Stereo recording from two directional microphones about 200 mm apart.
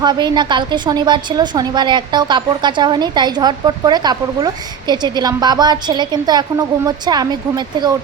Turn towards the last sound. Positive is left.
turn(degrees=-20)  # may be behind; listen again after turning